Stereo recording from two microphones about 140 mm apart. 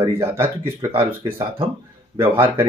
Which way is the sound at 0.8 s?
20° right (ahead or behind).